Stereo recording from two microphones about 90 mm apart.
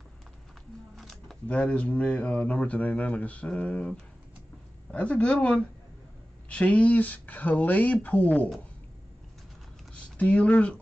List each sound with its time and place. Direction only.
0.9 s a sound: centre (ahead or behind)
1.5 s speech: 15° left (ahead or behind)
9.9 s speech: 15° left (ahead or behind)